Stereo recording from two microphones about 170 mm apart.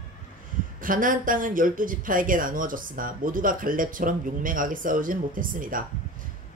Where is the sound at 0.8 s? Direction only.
55° right (ahead or behind).